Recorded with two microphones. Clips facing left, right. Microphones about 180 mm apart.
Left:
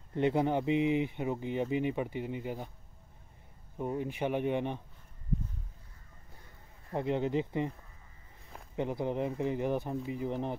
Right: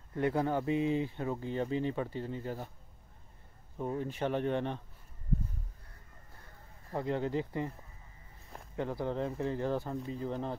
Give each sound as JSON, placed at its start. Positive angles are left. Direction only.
{"t": 0.1, "sound": "speech", "side_deg": 20}
{"t": 3.7, "sound": "speech", "side_deg": 10}
{"t": 6.9, "sound": "speech", "side_deg": 20}
{"t": 8.7, "sound": "speech", "side_deg": 20}